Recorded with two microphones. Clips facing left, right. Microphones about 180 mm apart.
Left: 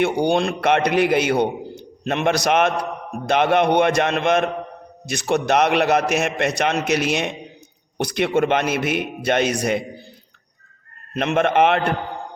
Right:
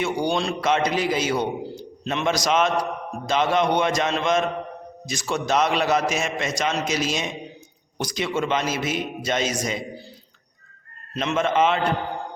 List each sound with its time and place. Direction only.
0.0 s a man's voice: 60° left (ahead or behind)
11.1 s a man's voice: 60° left (ahead or behind)